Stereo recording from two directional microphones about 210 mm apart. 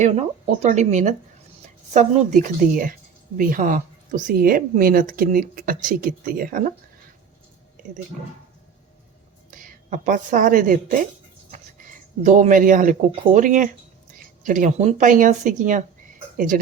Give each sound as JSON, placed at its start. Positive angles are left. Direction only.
{"t": 0.0, "sound": "a woman's voice", "side_deg": -30}
{"t": 9.5, "sound": "speech", "side_deg": -40}
{"t": 12.2, "sound": "a woman's voice", "side_deg": -35}